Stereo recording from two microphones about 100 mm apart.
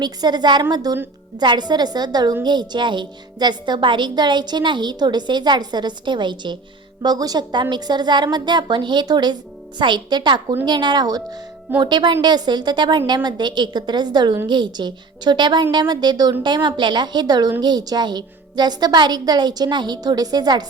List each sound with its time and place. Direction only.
0.0 s speech: 45° right (ahead or behind)